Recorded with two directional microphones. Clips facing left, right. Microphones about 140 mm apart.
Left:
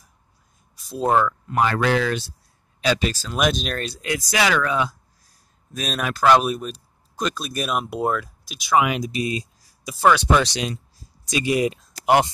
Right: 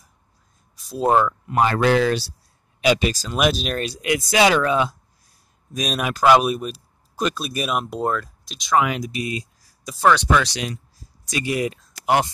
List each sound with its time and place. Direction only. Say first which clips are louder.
0.7 s a sound: right 2 dB; centre (ahead or behind)
1.5 s speech: right 3 dB; 25° right (ahead or behind)
2.8 s speech: right 3 dB; 15° right (ahead or behind)
4.3 s speech: right 4 dB; 25° right (ahead or behind)
5.7 s speech: right 2 dB; 10° right (ahead or behind); by 9.1 s 15° left (ahead or behind)
9.1 s speech: left 2 dB; 25° left (ahead or behind)
9.8 s speech: even; 5° left (ahead or behind)
10.3 s speech: left 1 dB; 25° left (ahead or behind)